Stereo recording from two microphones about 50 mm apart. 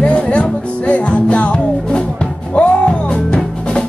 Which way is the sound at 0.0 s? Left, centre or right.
Left.